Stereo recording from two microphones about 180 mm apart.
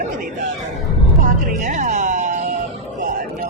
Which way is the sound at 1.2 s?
45° right (ahead or behind).